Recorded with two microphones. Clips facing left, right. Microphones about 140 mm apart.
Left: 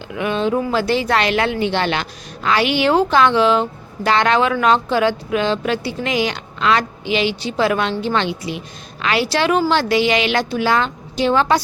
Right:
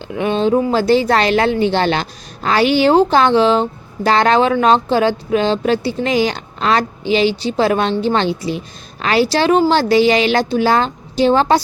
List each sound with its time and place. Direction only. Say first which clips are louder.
0.1 s speech: right 4 dB; 30° right (ahead or behind)